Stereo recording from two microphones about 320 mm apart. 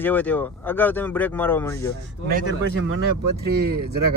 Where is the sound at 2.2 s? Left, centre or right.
Right.